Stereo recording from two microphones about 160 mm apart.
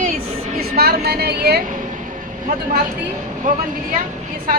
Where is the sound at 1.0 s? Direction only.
85° right; by 4.0 s 55° right (ahead or behind).